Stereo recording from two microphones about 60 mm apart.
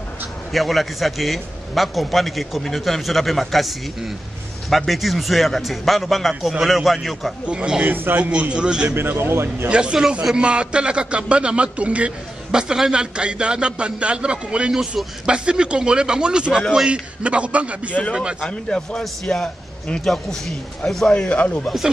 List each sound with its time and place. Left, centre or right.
0.5 s a man's voice: centre
7.4 s a man's voice: centre
7.8 s a man's voice: right
8.2 s a man's voice: centre
9.2 s a man's voice: right
9.7 s a man's voice: centre
18.5 s a man's voice: centre
21.1 s speech: centre